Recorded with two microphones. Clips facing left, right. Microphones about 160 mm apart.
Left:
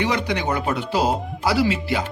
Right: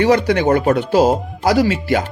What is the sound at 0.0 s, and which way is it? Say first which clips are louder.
Speech: right 9 dB; 45° right (ahead or behind).